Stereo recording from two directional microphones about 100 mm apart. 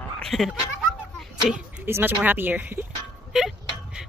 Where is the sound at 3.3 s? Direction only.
5° right (ahead or behind).